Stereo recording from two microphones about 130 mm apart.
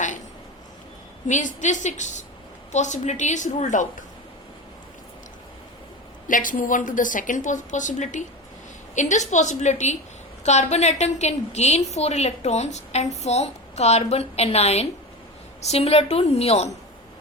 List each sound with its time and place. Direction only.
1.3 s a woman's voice: 70° left (ahead or behind)
6.2 s a woman's voice: 90° left; by 16.7 s 55° left (ahead or behind)